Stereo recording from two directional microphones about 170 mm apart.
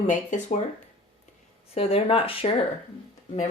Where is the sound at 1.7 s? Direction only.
35° left (ahead or behind).